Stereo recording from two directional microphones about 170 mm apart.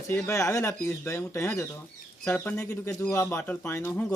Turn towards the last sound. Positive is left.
turn(degrees=15)  # may be behind; listen again after turning